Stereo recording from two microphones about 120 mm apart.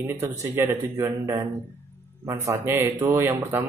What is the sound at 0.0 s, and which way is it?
Speech, 20° right (ahead or behind).